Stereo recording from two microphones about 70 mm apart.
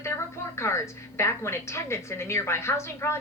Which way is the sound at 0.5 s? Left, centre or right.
Left.